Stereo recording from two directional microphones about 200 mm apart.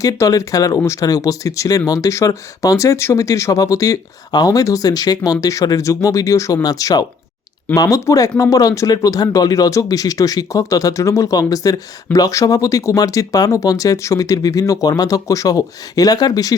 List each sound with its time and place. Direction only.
0.0 s speech: 15° left (ahead or behind)